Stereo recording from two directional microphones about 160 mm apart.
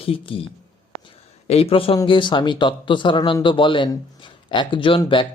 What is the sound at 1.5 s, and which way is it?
Speech, 40° left (ahead or behind).